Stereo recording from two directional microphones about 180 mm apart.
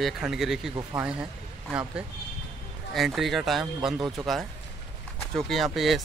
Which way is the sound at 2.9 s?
Centre (ahead or behind).